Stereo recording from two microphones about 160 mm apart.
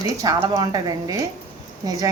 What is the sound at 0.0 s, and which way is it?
A woman's voice, 25° right (ahead or behind).